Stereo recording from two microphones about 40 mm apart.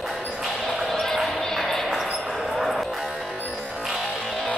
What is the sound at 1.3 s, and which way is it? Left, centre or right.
Music, centre.